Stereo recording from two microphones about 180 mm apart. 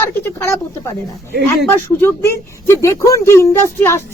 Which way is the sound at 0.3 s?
15° left (ahead or behind).